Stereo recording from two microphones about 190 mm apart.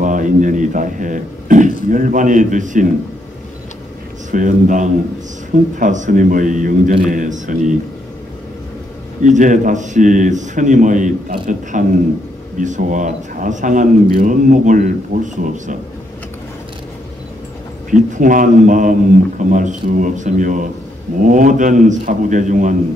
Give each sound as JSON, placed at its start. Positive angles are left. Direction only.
{"t": 0.0, "sound": "a man's voice", "side_deg": -45}
{"t": 4.3, "sound": "a man's voice", "side_deg": -45}
{"t": 9.2, "sound": "a man's voice", "side_deg": -40}
{"t": 17.8, "sound": "a man's voice", "side_deg": -40}